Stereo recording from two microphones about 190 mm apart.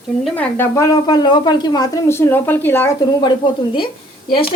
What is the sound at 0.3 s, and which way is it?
A woman's voice, 10° left (ahead or behind).